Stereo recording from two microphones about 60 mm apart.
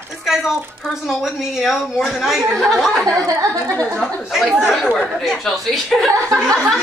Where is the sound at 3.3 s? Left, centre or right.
Right.